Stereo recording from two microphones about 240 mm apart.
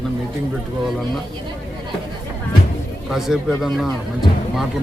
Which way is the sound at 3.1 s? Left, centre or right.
Centre.